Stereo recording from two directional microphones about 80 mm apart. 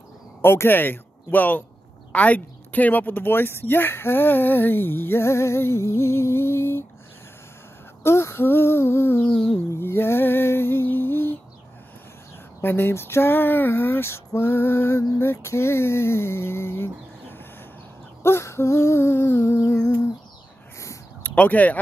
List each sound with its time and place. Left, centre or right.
0.4 s speech: left
8.0 s music: left
9.3 s a sound: centre
9.8 s a sound: left
12.6 s speech: left
15.1 s music: left
18.2 s music: left
21.4 s speech: centre